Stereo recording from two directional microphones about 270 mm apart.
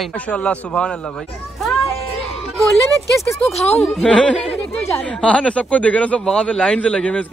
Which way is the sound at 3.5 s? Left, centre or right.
Left.